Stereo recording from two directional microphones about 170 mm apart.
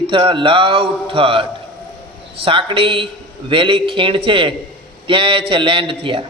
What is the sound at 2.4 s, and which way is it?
A man's voice, 30° right (ahead or behind).